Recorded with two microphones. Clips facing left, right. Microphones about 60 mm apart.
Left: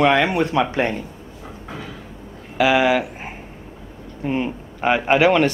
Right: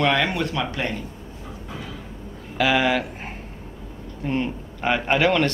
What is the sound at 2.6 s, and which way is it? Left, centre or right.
A man's voice, centre.